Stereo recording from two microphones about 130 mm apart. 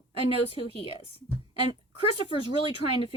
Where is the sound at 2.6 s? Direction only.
45° left (ahead or behind).